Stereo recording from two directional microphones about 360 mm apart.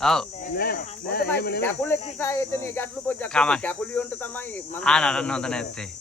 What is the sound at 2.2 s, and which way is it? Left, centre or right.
Speech, centre.